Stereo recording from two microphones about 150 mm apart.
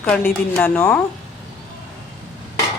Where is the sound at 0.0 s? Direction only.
10° left (ahead or behind).